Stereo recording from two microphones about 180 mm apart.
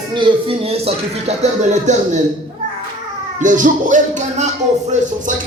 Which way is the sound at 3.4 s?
45° right (ahead or behind).